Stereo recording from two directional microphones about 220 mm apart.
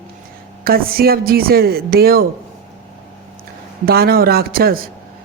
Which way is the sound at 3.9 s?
45° right (ahead or behind).